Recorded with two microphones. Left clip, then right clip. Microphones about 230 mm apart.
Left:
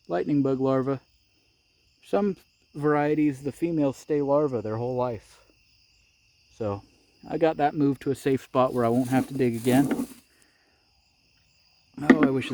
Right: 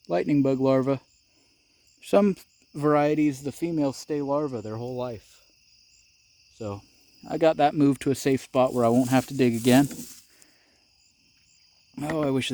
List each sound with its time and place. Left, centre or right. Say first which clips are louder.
0.0 s speech: right 2 dB; right; by 5.4 s centre
6.6 s speech: left 5 dB; centre
7.2 s speech: right 2 dB; right
9.0 s speech: right 2 dB; right
11.9 s speech: left 5 dB; right